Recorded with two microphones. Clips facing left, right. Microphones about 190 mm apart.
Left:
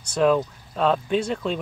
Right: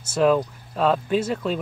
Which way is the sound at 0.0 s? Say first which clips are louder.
Right 1 dB; 5° right (ahead or behind).